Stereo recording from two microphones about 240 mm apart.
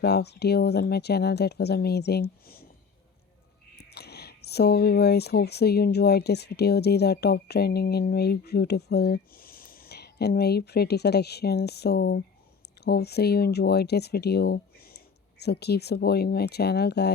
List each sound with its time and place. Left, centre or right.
0.0 s speech: left
3.8 s speech: left